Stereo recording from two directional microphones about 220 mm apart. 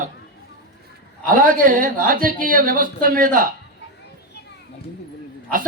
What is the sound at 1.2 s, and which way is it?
A man's voice, 35° right (ahead or behind).